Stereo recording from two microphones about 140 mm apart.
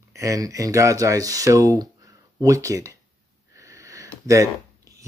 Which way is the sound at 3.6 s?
20° right (ahead or behind).